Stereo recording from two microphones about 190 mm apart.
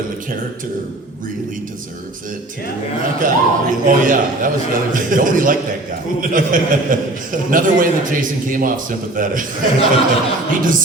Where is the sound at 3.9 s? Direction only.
45° right (ahead or behind).